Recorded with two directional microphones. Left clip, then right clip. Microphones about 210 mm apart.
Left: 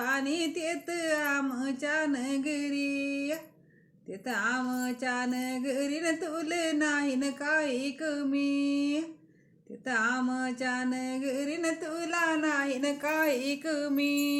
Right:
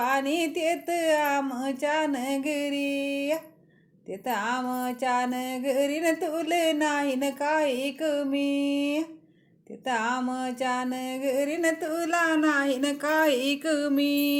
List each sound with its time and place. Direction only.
0.0 s music: 5° right (ahead or behind)